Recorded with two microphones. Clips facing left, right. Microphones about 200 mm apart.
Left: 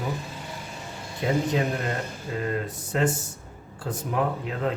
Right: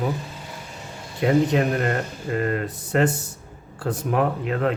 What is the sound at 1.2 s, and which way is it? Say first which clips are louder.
Speech: right 5 dB; 65° right (ahead or behind).